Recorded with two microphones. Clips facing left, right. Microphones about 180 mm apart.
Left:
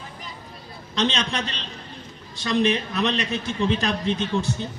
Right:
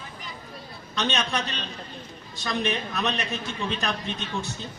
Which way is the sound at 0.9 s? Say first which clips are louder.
Left 3 dB; 80° left.